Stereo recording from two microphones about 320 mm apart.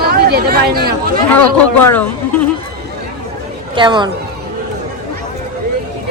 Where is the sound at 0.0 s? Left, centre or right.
Right.